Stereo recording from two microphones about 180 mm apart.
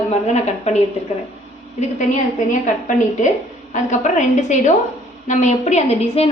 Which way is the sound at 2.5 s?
45° left (ahead or behind).